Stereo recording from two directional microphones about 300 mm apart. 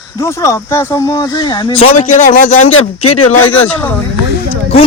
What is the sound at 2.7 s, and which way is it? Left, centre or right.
Speech, left.